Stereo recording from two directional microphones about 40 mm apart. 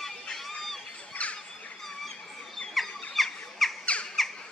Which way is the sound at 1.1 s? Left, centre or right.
Left.